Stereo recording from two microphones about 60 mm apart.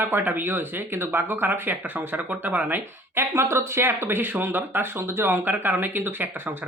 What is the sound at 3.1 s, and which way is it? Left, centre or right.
Speech, right.